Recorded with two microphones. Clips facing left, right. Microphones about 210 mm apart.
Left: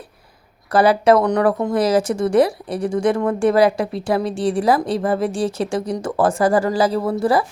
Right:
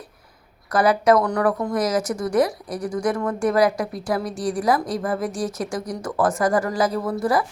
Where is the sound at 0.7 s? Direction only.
30° left (ahead or behind).